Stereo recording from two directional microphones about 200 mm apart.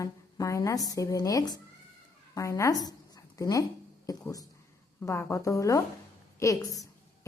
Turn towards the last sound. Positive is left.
turn(degrees=15)  # may be behind; listen again after turning